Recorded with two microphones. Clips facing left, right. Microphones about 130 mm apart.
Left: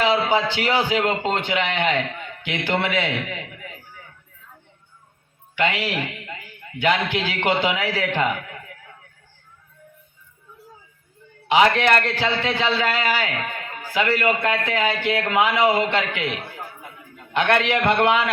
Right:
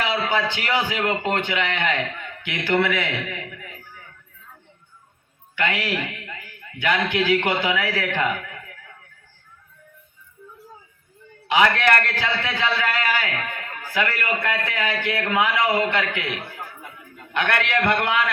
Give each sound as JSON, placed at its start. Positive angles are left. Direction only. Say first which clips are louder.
{"t": 0.0, "sound": "a man's voice", "louder": "left 4 dB", "side_deg": 25}
{"t": 5.5, "sound": "a man's voice", "louder": "left 2 dB", "side_deg": 25}
{"t": 11.4, "sound": "a man's voice", "louder": "left 2 dB", "side_deg": 25}
{"t": 17.3, "sound": "a man's voice", "louder": "left 3 dB", "side_deg": 20}